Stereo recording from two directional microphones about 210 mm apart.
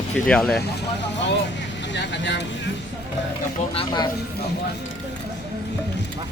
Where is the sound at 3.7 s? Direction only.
20° left (ahead or behind).